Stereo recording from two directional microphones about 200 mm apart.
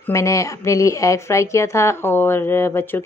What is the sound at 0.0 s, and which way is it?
Speech, 15° left (ahead or behind).